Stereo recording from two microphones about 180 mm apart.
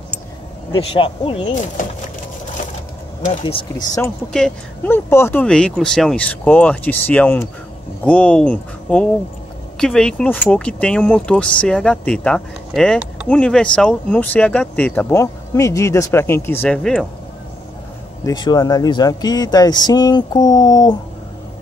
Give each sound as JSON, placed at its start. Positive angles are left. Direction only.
{"t": 0.7, "sound": "speech", "side_deg": 30}
{"t": 1.5, "sound": "speech", "side_deg": 45}
{"t": 3.3, "sound": "speech", "side_deg": 30}
{"t": 4.3, "sound": "speech", "side_deg": 5}
{"t": 18.2, "sound": "speech", "side_deg": 25}